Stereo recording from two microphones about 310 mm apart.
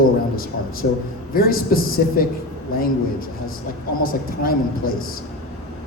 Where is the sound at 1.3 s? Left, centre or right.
Left.